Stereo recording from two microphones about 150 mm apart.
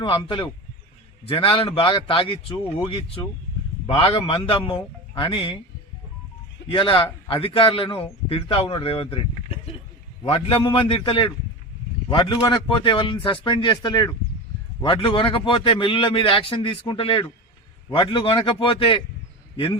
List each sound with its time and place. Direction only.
0.0 s a man's voice: 30° left (ahead or behind)
6.7 s a man's voice: 35° left (ahead or behind)
10.2 s a man's voice: 35° left (ahead or behind)
12.4 s a man's voice: 30° left (ahead or behind)